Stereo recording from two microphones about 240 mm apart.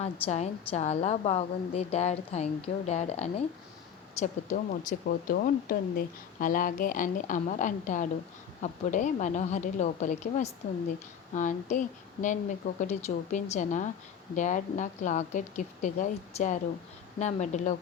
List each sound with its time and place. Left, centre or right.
0.0 s a woman's voice: left